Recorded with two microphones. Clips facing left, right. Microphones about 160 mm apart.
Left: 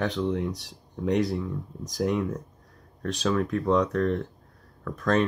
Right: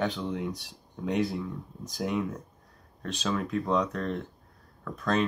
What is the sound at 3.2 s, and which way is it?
Speech, 15° right (ahead or behind).